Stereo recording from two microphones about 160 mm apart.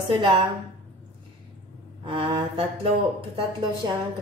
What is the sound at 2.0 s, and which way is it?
Mantra, 30° right (ahead or behind).